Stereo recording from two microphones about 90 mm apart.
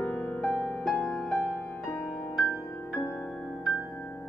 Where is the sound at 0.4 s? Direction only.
15° left (ahead or behind).